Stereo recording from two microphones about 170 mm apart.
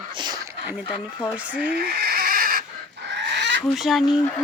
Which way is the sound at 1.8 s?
65° right (ahead or behind).